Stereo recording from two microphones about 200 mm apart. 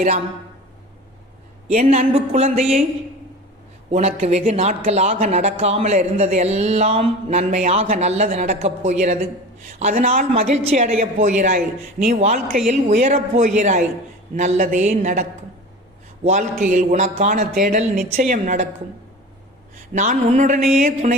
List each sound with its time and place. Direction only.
1.6 s speech: 35° right (ahead or behind)
3.9 s speech: 30° right (ahead or behind)
16.3 s speech: 40° right (ahead or behind)
19.9 s speech: 40° right (ahead or behind)